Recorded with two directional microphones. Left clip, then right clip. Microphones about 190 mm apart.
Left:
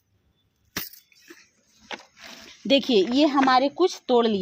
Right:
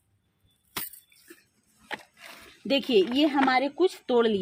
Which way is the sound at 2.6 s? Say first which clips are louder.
Left 3 dB; 40° left (ahead or behind).